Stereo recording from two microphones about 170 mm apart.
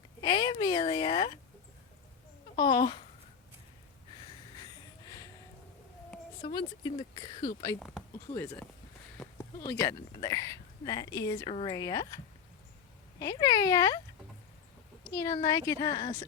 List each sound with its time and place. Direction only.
0.2 s speech: 25° left (ahead or behind)
2.6 s speech: 25° left (ahead or behind)
4.5 s a sound: 25° left (ahead or behind)
6.4 s speech: 25° left (ahead or behind)
9.1 s speech: 15° left (ahead or behind)
11.4 s speech: 30° left (ahead or behind)
13.1 s speech: 20° left (ahead or behind)
15.1 s speech: 20° left (ahead or behind)